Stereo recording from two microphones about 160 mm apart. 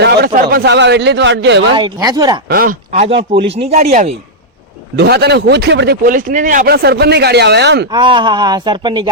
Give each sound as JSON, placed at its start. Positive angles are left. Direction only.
{"t": 0.0, "sound": "a sound", "side_deg": -90}
{"t": 0.4, "sound": "a man's voice", "side_deg": -90}
{"t": 1.7, "sound": "speech", "side_deg": -25}
{"t": 2.5, "sound": "speech", "side_deg": -60}
{"t": 3.5, "sound": "speech", "side_deg": -40}
{"t": 4.9, "sound": "speech", "side_deg": -90}
{"t": 6.7, "sound": "a man's voice", "side_deg": -85}
{"t": 7.9, "sound": "speech", "side_deg": -30}